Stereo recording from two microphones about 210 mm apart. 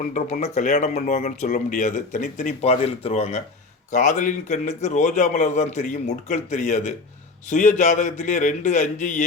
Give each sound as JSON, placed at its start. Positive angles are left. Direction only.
{"t": 0.0, "sound": "speech", "side_deg": 35}